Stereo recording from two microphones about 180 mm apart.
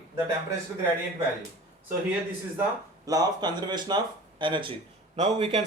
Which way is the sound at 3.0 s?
20° right (ahead or behind).